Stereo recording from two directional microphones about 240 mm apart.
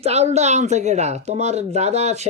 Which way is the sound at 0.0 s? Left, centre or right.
Right.